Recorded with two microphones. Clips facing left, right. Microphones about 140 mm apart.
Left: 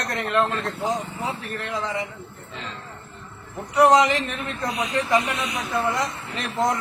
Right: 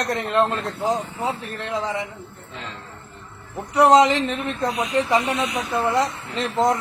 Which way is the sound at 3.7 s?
20° right (ahead or behind).